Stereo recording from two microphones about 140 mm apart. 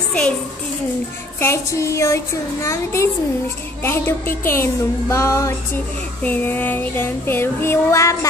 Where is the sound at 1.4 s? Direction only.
20° left (ahead or behind).